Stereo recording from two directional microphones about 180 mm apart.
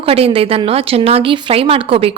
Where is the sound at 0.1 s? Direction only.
35° right (ahead or behind).